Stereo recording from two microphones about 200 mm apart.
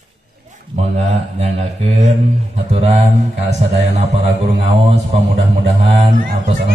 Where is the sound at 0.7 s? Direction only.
35° right (ahead or behind).